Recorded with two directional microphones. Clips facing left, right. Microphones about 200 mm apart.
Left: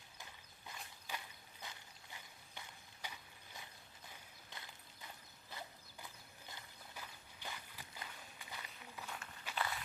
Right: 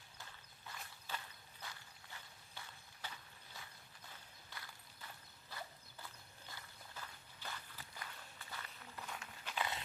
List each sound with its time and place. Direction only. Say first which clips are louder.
0.2 s walk: even; 15° left (ahead or behind)
5.5 s horse: right 1 dB; 20° left (ahead or behind)
6.5 s a sound: even; 15° left (ahead or behind)
9.0 s walk: even; centre (ahead or behind)
9.6 s walk: even; 20° right (ahead or behind)